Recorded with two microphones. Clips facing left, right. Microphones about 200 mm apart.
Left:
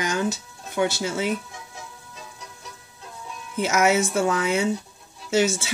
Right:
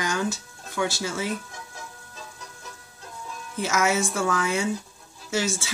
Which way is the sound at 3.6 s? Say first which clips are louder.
Left 4 dB; 20° left (ahead or behind).